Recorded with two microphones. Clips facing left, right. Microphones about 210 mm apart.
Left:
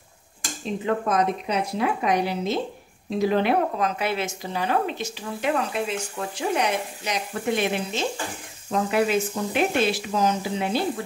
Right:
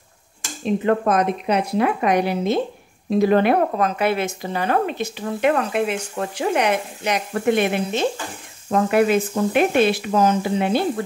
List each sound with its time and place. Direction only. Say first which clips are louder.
0.8 s speech: right 3 dB; 60° right (ahead or behind)